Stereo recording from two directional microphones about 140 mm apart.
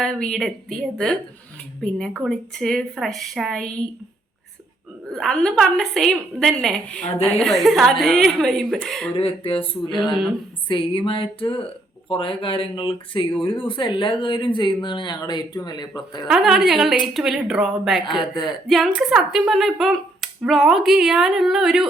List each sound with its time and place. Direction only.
0.0 s speech: 5° left (ahead or behind)
1.8 s speech: centre (ahead or behind)
5.1 s speech: 5° left (ahead or behind)
9.1 s speech: 40° left (ahead or behind)
9.9 s speech: centre (ahead or behind)
10.7 s speech: 35° left (ahead or behind)
16.2 s speech: 5° right (ahead or behind)
18.2 s speech: 30° left (ahead or behind)
18.7 s speech: centre (ahead or behind)